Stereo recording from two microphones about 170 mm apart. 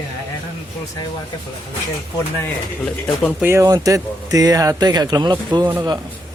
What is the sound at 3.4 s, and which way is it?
Speech, 15° right (ahead or behind).